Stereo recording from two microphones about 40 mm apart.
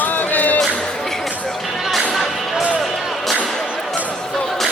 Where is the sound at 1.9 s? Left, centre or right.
Centre.